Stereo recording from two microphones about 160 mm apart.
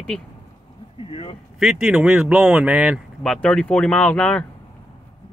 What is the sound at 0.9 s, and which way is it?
Speech, 35° left (ahead or behind).